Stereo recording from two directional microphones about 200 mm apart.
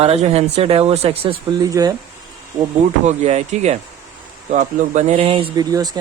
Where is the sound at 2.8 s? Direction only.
35° right (ahead or behind).